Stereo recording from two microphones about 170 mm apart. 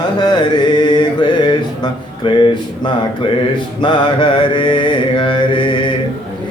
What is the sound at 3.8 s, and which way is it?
Mantra, 30° left (ahead or behind).